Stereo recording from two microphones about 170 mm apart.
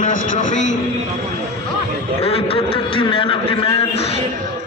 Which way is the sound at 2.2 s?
35° left (ahead or behind).